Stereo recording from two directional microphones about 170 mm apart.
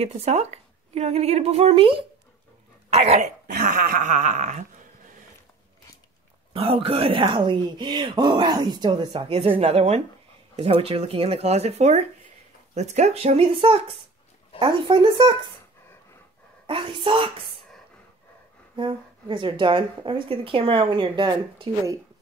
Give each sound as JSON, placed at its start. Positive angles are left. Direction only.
{"t": 0.0, "sound": "a woman's voice", "side_deg": -40}
{"t": 2.9, "sound": "a sound", "side_deg": -40}
{"t": 6.5, "sound": "a woman's voice", "side_deg": -35}
{"t": 16.6, "sound": "a woman's voice", "side_deg": -30}
{"t": 18.8, "sound": "a woman's voice", "side_deg": -30}